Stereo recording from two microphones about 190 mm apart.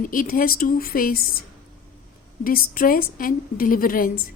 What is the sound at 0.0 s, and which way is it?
Speech, 45° left (ahead or behind).